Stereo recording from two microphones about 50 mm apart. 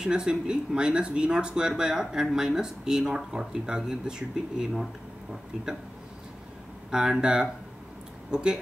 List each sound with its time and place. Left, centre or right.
0.0 s speech: centre
6.9 s speech: centre